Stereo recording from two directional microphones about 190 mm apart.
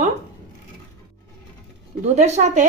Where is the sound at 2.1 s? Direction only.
35° right (ahead or behind).